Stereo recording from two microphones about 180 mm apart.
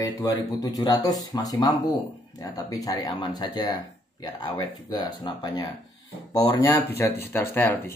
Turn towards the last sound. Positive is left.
turn(degrees=15)  # may be behind; listen again after turning